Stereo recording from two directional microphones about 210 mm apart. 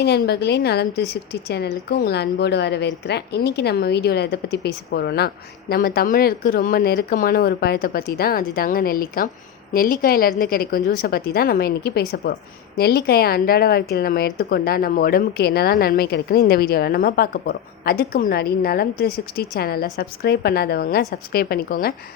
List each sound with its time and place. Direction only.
0.0 s a woman's voice: 50° left (ahead or behind)